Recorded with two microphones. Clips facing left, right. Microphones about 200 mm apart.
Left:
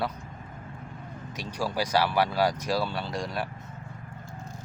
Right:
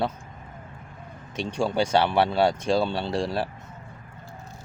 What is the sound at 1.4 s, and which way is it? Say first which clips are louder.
Speech: right 6 dB; 25° right (ahead or behind).